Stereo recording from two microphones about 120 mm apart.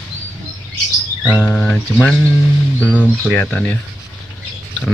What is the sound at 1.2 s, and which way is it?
Chirp, 15° left (ahead or behind).